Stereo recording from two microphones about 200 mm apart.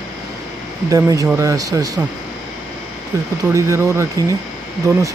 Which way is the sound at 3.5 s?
15° right (ahead or behind).